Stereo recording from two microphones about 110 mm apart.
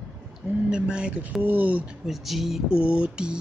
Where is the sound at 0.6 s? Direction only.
10° right (ahead or behind).